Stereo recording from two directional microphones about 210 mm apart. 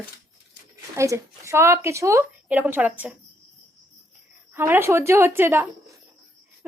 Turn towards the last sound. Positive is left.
turn(degrees=-10)  # may be behind; listen again after turning